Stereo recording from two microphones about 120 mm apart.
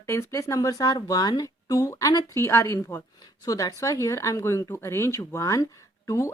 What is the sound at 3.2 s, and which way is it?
Speech, 30° left (ahead or behind).